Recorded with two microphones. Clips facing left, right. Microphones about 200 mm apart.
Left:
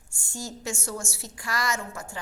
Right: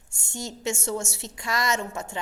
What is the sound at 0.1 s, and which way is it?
A woman's voice, 20° right (ahead or behind).